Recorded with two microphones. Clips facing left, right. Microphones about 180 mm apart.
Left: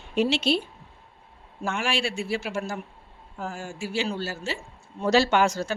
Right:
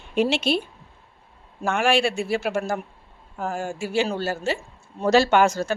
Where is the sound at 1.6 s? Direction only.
55° right (ahead or behind).